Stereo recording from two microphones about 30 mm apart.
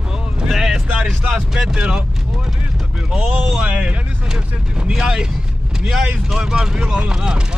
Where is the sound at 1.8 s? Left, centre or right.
Right.